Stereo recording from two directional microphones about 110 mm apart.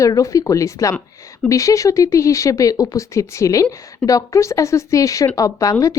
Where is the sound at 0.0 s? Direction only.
30° left (ahead or behind).